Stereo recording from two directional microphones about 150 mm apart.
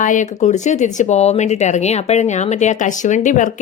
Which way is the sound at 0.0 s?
60° left (ahead or behind).